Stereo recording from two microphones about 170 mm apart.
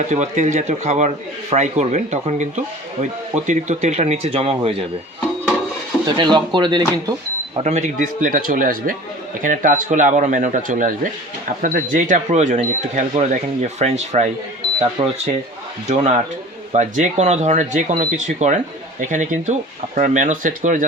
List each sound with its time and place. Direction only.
0.1 s speech: 45° right (ahead or behind)
6.1 s speech: 25° right (ahead or behind)
7.6 s speech: 40° right (ahead or behind)